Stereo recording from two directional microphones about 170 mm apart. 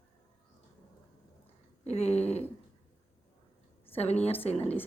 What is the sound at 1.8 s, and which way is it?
Speech, 40° left (ahead or behind).